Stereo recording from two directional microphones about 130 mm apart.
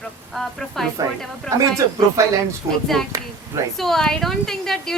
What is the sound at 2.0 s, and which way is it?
Speech, 25° right (ahead or behind).